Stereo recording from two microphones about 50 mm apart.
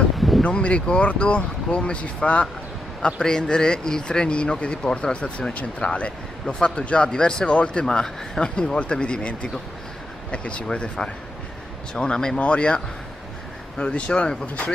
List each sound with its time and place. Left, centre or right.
0.4 s speech: left
3.2 s speech: centre